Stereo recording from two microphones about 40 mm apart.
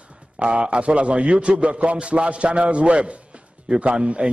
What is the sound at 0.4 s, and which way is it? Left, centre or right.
A man's voice, right.